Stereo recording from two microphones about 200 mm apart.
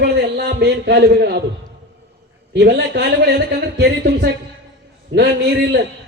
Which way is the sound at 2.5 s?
55° right (ahead or behind).